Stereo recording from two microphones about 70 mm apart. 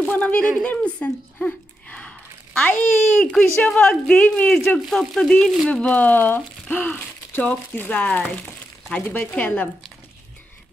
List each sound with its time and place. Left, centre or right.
0.1 s speech: left
4.8 s speech: centre; by 9.7 s left